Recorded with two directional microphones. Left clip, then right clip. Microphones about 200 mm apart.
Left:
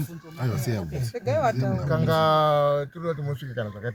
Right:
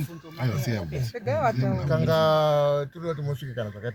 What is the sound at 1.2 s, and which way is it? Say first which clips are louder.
Speech: left 1 dB; 55° left (ahead or behind).